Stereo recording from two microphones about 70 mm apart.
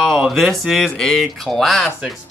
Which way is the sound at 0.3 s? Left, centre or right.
Centre.